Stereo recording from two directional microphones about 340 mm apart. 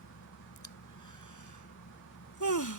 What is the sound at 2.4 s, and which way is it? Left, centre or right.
Speech, left.